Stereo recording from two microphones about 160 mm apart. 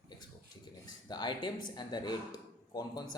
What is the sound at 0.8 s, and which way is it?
Speech, 25° left (ahead or behind).